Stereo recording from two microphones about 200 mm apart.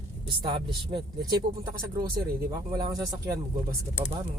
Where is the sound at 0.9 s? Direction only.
20° right (ahead or behind).